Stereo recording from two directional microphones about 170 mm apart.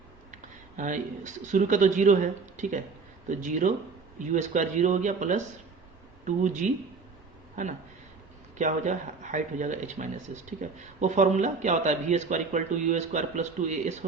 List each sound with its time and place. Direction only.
0.8 s speech: 50° right (ahead or behind)